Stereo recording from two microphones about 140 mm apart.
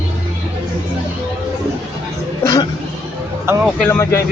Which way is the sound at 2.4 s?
30° left (ahead or behind).